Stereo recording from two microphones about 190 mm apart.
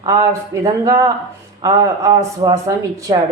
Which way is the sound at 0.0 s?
20° right (ahead or behind).